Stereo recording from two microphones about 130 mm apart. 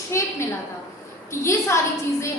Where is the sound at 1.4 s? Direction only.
20° left (ahead or behind).